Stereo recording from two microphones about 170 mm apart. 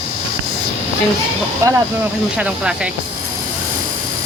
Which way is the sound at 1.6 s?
20° right (ahead or behind).